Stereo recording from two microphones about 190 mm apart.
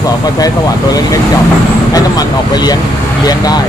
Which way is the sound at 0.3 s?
20° left (ahead or behind).